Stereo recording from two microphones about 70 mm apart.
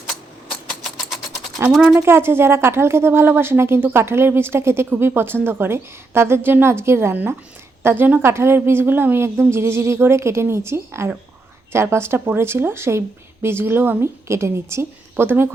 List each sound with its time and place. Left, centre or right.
1.7 s speech: centre
2.0 s a woman's voice: right
7.9 s a woman's voice: right